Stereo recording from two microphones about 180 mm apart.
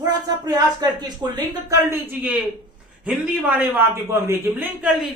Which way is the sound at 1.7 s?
10° right (ahead or behind).